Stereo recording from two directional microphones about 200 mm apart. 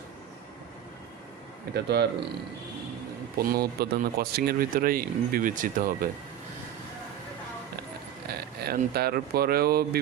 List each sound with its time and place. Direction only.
1.7 s speech: 55° right (ahead or behind)
3.3 s speech: 50° right (ahead or behind)
8.3 s speech: 50° right (ahead or behind)